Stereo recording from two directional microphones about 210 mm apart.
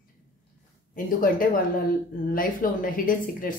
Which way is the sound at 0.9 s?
40° left (ahead or behind).